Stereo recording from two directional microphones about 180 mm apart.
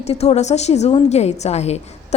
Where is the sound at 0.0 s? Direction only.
35° left (ahead or behind).